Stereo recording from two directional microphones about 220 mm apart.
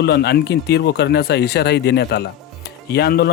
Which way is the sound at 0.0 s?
50° left (ahead or behind).